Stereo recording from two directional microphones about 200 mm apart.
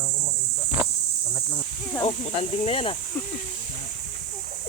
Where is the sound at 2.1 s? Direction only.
30° left (ahead or behind).